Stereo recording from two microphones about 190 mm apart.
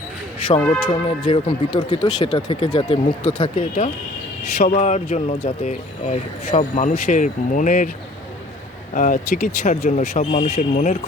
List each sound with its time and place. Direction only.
0.4 s speech: 25° left (ahead or behind)
4.5 s speech: 40° left (ahead or behind)
9.0 s speech: 45° left (ahead or behind)
10.0 s speech: 35° left (ahead or behind)